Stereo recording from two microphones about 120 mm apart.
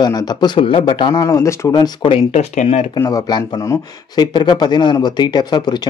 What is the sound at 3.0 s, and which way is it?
Speech, 35° left (ahead or behind).